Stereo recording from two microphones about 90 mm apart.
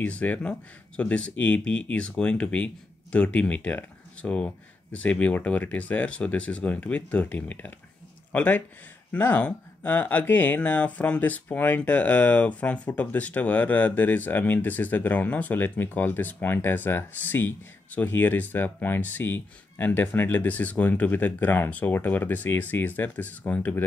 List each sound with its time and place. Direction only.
0.0 s speech: 15° left (ahead or behind)